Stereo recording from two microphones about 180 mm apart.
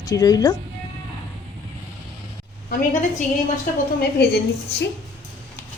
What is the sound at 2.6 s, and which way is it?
Speech, 45° left (ahead or behind).